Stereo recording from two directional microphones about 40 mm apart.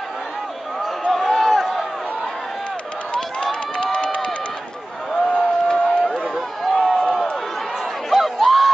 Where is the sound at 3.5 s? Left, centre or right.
Left.